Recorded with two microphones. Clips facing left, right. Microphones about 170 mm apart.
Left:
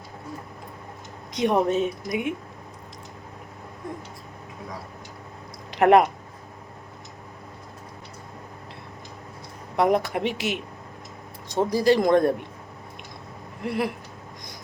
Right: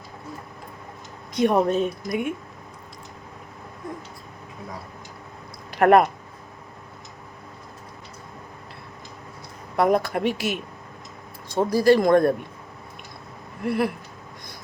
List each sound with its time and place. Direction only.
1.3 s speech: 20° left (ahead or behind)
5.7 s speech: 20° left (ahead or behind)
9.7 s speech: 20° left (ahead or behind)
13.7 s speech: 20° left (ahead or behind)